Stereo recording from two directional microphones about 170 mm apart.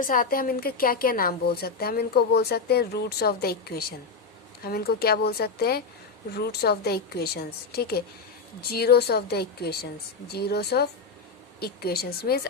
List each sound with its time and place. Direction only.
0.0 s a woman's voice: 55° left (ahead or behind)